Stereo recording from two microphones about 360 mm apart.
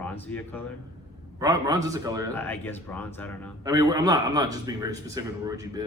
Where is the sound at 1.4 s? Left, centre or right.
Centre.